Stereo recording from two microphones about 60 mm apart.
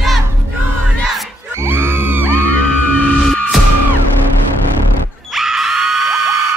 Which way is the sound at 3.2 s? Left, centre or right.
Centre.